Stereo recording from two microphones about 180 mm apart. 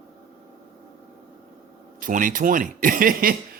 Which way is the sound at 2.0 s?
50° right (ahead or behind).